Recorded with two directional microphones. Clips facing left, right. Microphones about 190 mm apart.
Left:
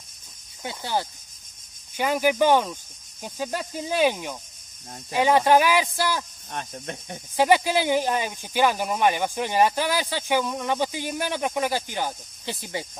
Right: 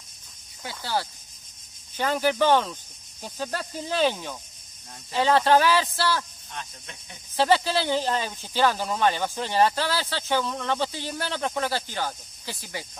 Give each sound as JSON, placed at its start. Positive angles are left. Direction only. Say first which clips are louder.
{"t": 0.7, "sound": "speech", "louder": "left 2 dB", "side_deg": 20}
{"t": 6.5, "sound": "speech", "louder": "left 7 dB", "side_deg": 50}
{"t": 7.3, "sound": "speech", "louder": "left 2 dB", "side_deg": 15}